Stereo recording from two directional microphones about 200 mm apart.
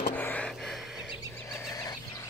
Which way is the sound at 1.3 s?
10° left (ahead or behind).